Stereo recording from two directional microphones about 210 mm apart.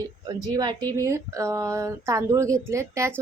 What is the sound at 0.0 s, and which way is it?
A woman's voice, 20° right (ahead or behind).